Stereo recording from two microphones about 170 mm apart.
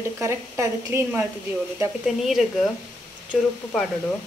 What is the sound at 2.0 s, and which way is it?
A woman's voice, centre (ahead or behind).